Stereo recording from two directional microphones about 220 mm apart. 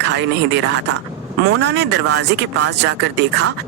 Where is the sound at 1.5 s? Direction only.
50° right (ahead or behind).